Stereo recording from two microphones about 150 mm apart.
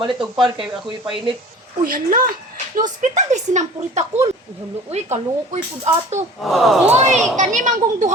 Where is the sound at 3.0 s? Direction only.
55° right (ahead or behind).